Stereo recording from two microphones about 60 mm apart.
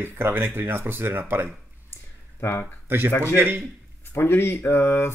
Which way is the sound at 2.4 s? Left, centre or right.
Left.